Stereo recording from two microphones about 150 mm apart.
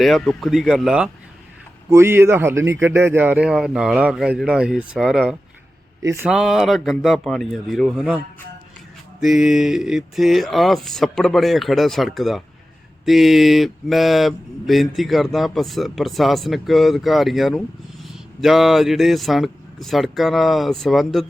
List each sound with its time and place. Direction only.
0.0 s speech: centre (ahead or behind)
1.9 s a man's voice: 15° right (ahead or behind)
6.0 s speech: 20° right (ahead or behind)
6.2 s speech: 5° right (ahead or behind)
9.2 s speech: centre (ahead or behind)